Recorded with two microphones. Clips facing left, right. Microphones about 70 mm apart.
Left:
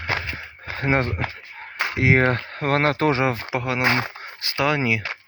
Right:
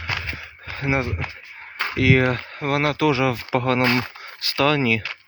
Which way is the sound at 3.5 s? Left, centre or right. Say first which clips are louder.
Right 4 dB; centre.